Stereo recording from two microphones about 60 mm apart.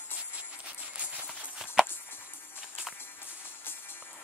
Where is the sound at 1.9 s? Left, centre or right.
Left.